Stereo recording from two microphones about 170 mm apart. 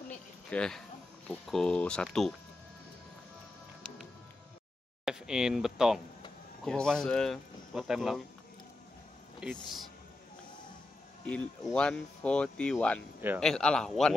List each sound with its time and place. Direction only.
0.5 s speech: 5° left (ahead or behind)
5.0 s speech: 5° right (ahead or behind)
9.4 s speech: centre (ahead or behind)
11.2 s speech: 5° left (ahead or behind)